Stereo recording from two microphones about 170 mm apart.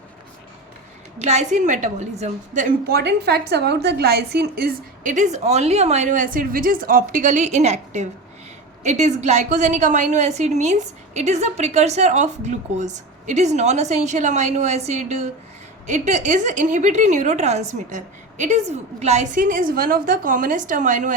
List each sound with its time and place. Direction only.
1.2 s a woman's voice: 40° right (ahead or behind)
2.9 s a woman's voice: 80° right; by 21.2 s 45° right (ahead or behind)